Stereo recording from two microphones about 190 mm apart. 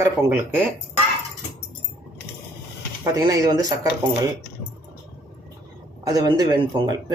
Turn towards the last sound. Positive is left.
turn(degrees=-20)  # may be behind; listen again after turning